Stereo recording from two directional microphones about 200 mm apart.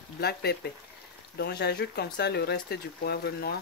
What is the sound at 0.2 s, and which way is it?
Speech, 50° left (ahead or behind).